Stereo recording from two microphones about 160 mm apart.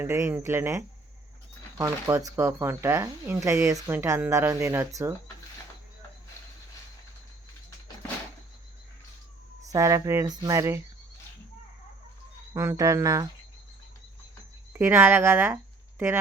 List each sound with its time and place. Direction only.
0.0 s speech: 15° right (ahead or behind)
9.6 s speech: 20° right (ahead or behind)
12.5 s speech: 20° right (ahead or behind)
14.7 s speech: 15° right (ahead or behind)